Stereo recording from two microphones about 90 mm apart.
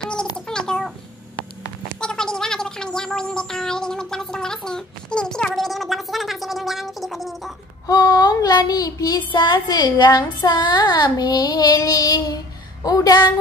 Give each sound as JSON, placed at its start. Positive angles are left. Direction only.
{"t": 0.5, "sound": "a sound", "side_deg": 5}
{"t": 2.0, "sound": "speech", "side_deg": 5}
{"t": 7.8, "sound": "speech", "side_deg": 45}
{"t": 9.3, "sound": "speech", "side_deg": 60}